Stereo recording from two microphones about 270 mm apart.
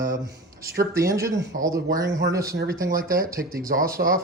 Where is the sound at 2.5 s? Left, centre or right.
Right.